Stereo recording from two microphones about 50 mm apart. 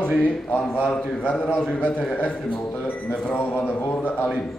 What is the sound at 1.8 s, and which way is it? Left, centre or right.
Speech, left.